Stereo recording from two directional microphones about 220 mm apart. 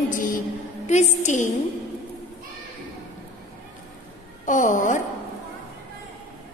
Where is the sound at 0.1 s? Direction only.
40° left (ahead or behind).